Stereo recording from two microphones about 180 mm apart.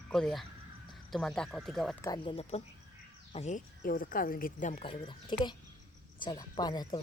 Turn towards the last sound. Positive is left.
turn(degrees=25)  # may be behind; listen again after turning